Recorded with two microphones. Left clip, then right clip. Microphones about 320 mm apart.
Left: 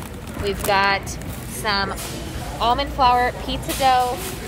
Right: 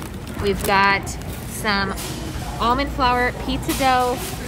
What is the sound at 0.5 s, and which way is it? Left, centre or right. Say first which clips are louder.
Speech: right 2 dB; centre.